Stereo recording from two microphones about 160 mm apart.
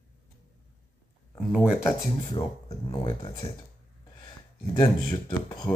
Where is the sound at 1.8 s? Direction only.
25° left (ahead or behind).